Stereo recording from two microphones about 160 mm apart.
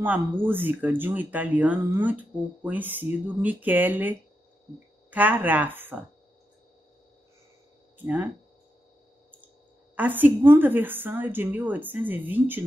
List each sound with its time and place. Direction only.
0.0 s speech: 10° right (ahead or behind)
5.1 s speech: 10° right (ahead or behind)
8.0 s speech: 10° right (ahead or behind)
9.9 s speech: 10° right (ahead or behind)